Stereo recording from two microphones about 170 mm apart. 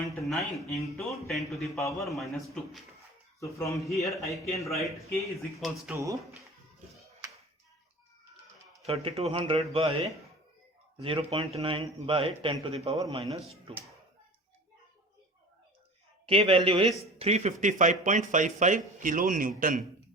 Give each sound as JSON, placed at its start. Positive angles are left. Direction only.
{"t": 0.2, "sound": "speech", "side_deg": 0}
{"t": 3.4, "sound": "speech", "side_deg": 20}
{"t": 3.9, "sound": "speech", "side_deg": 0}
{"t": 5.9, "sound": "speech", "side_deg": -15}
{"t": 8.9, "sound": "speech", "side_deg": -35}
{"t": 11.0, "sound": "speech", "side_deg": -35}
{"t": 13.0, "sound": "a man's voice", "side_deg": -25}
{"t": 16.2, "sound": "speech", "side_deg": -35}